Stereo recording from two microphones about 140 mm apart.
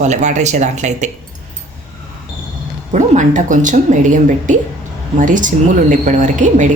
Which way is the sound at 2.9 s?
60° right (ahead or behind).